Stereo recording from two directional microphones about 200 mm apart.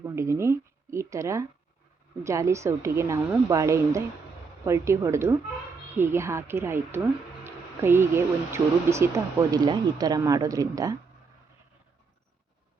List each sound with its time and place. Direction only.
0.0 s speech: 15° right (ahead or behind)